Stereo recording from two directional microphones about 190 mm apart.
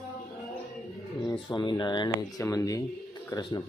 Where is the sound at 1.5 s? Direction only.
25° left (ahead or behind).